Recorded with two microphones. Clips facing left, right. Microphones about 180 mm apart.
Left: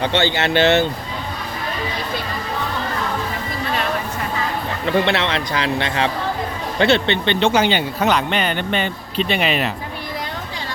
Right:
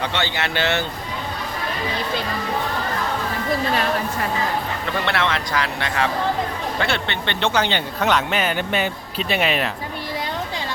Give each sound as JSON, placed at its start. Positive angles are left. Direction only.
{"t": 0.0, "sound": "speech", "side_deg": 30}
{"t": 5.0, "sound": "speech", "side_deg": 20}
{"t": 8.0, "sound": "speech", "side_deg": 0}